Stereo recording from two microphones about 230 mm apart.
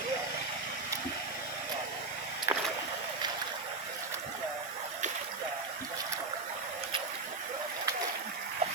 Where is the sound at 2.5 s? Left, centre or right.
Centre.